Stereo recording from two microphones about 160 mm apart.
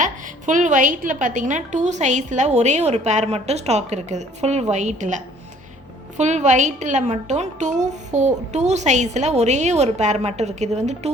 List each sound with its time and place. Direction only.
0.0 s a woman's voice: 50° right (ahead or behind)